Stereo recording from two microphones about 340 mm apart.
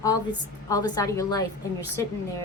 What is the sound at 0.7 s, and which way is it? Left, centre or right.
Speech, centre.